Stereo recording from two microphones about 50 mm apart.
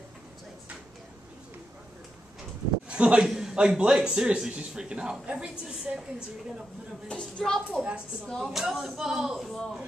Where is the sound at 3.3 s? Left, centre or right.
Centre.